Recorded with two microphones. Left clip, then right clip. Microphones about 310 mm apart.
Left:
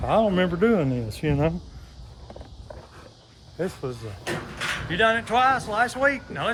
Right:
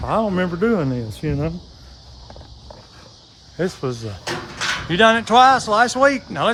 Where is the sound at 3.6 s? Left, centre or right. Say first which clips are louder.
Right 6 dB; right.